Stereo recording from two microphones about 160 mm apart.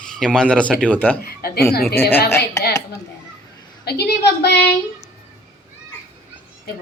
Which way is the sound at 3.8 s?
90° left.